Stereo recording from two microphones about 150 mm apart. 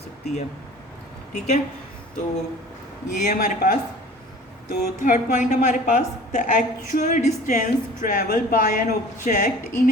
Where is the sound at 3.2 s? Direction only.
55° left (ahead or behind).